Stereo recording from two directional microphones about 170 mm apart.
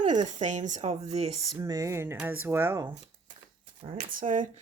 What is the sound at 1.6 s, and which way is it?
Speech, 20° right (ahead or behind).